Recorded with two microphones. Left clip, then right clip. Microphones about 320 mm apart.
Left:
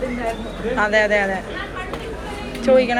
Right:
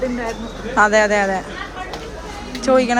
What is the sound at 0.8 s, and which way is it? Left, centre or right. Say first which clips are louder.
Speech: right 3 dB; centre.